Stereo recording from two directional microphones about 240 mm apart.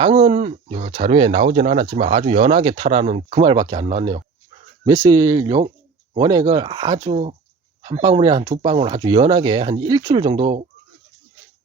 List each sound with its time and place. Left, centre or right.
0.0 s speech: right